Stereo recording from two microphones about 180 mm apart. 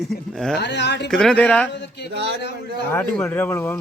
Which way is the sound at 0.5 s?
70° left (ahead or behind).